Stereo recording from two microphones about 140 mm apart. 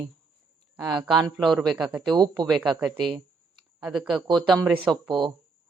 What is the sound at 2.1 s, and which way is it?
Speech, 30° right (ahead or behind).